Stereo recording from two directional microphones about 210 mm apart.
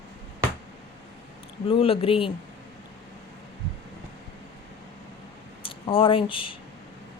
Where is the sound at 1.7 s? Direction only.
25° left (ahead or behind).